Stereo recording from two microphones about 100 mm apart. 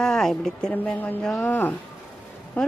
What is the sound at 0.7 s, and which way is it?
Speech, 15° left (ahead or behind).